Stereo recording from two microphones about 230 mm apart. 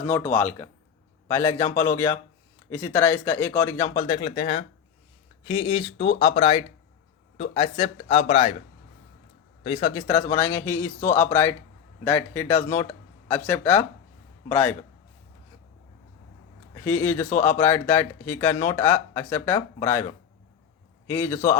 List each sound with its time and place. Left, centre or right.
0.1 s speech: centre; by 8.5 s left
9.6 s a man's voice: left; by 14.8 s centre
16.8 s speech: centre
21.1 s speech: centre